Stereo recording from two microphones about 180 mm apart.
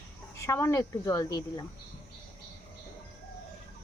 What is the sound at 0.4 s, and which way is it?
A woman's voice, 15° left (ahead or behind).